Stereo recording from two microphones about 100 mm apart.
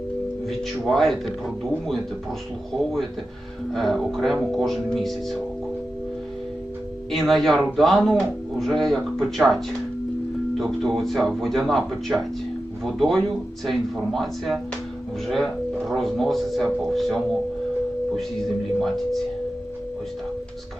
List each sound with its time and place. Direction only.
0.4 s speech: centre (ahead or behind)
7.1 s speech: centre (ahead or behind)
10.6 s speech: centre (ahead or behind)